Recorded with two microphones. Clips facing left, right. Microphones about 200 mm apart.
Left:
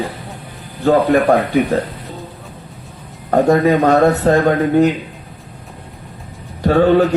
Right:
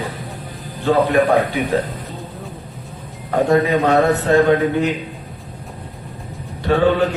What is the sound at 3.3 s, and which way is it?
Speech, 45° left (ahead or behind).